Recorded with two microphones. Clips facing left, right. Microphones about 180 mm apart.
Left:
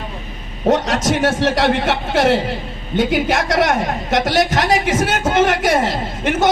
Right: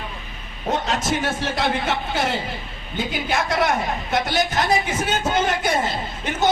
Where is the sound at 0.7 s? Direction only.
90° left.